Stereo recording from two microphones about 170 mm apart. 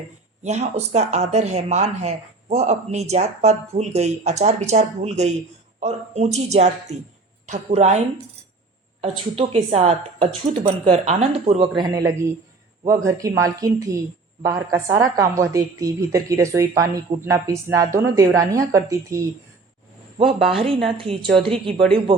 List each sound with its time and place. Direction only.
0.4 s speech: 40° right (ahead or behind)
11.8 s a woman's voice: 20° right (ahead or behind)
20.1 s speech: 30° right (ahead or behind)